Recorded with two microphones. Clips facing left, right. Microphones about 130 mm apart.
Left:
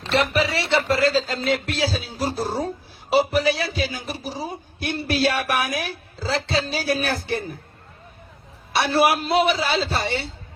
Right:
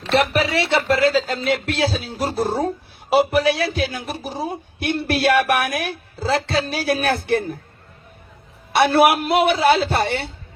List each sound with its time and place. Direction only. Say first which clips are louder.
0.1 s speech: right 3 dB; 60° right (ahead or behind)
8.7 s speech: right 4 dB; 60° right (ahead or behind)